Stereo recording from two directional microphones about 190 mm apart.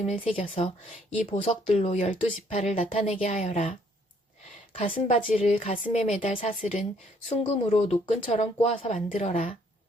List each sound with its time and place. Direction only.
0.0 s a woman's voice: 35° left (ahead or behind)